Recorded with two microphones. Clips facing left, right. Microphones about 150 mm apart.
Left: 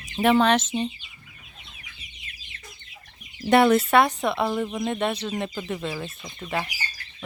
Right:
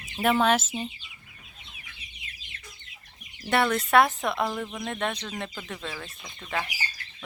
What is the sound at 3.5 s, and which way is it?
Speech, 15° left (ahead or behind).